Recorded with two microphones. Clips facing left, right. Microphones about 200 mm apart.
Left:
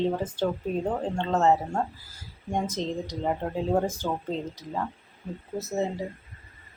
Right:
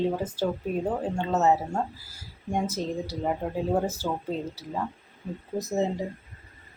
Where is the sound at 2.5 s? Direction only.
10° right (ahead or behind).